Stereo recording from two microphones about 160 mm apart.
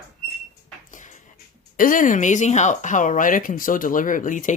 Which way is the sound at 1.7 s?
60° left (ahead or behind).